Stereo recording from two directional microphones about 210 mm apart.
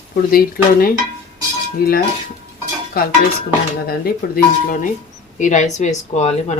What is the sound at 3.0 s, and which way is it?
Speech, 45° left (ahead or behind).